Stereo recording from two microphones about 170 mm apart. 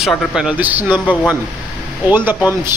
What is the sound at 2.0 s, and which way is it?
Speech, 10° right (ahead or behind).